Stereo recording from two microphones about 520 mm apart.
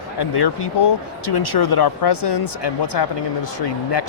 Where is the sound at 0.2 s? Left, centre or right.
Left.